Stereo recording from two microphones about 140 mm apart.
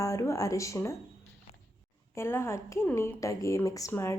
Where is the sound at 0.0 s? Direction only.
20° left (ahead or behind).